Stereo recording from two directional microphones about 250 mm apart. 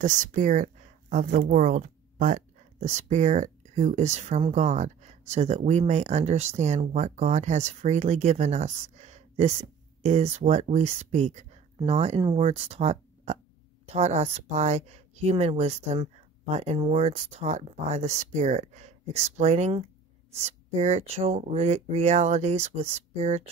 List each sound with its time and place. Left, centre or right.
0.0 s speech: right